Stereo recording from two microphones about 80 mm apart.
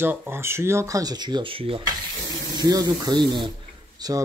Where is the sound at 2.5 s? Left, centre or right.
Right.